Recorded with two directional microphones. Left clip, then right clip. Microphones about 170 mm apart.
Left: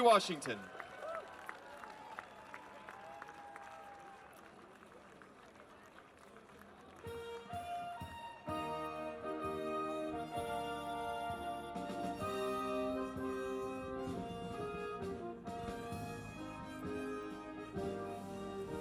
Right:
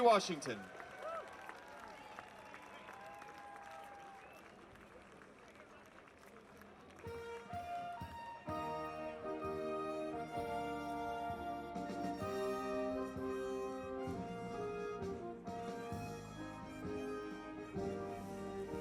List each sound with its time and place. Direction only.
0.0 s speech: 25° left (ahead or behind)
7.0 s music: 25° left (ahead or behind)